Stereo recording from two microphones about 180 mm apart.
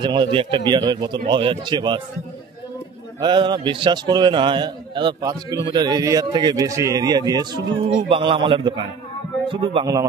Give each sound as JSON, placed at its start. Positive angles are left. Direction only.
{"t": 0.0, "sound": "a man's voice", "side_deg": -25}
{"t": 3.2, "sound": "a man's voice", "side_deg": -25}